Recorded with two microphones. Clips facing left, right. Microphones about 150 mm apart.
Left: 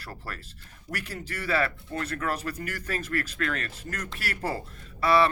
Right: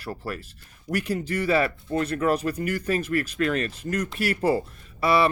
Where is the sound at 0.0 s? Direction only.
15° right (ahead or behind).